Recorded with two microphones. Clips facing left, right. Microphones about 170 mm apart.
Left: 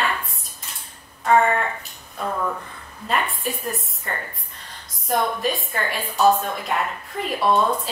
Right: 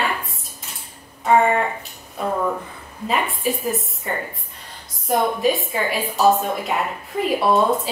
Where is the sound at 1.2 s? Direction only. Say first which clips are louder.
Right 2 dB; 10° right (ahead or behind).